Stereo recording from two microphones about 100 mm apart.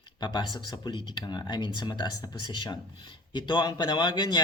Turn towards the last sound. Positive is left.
turn(degrees=50)  # may be behind; listen again after turning